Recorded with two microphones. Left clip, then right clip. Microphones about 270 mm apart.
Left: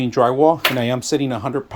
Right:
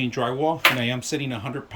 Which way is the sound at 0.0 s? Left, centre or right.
Centre.